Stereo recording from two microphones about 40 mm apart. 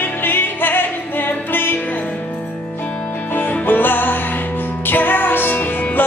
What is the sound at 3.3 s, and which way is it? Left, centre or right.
Music, left.